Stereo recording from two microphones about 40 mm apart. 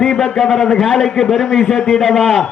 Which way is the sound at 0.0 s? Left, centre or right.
Centre.